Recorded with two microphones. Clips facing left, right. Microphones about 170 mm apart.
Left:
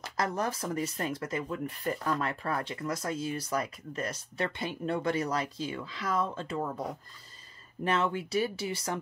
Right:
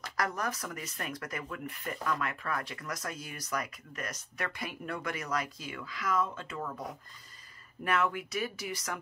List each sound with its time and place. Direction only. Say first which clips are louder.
0.0 s speech: left 3 dB; 25° left (ahead or behind)
7.8 s speech: left 2 dB; 25° left (ahead or behind)